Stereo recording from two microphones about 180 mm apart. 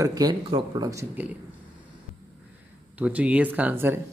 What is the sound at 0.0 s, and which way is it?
Speech, 20° right (ahead or behind).